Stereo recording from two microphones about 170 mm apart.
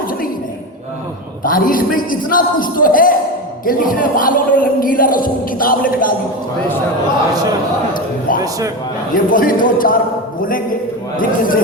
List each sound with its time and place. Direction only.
1.5 s speech: 55° left (ahead or behind)
8.4 s a man's voice: 20° right (ahead or behind)
9.1 s a man's voice: 55° left (ahead or behind)